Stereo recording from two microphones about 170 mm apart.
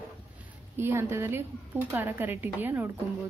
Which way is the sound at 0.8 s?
15° right (ahead or behind).